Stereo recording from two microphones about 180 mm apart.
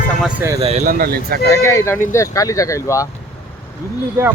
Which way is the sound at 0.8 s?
55° right (ahead or behind).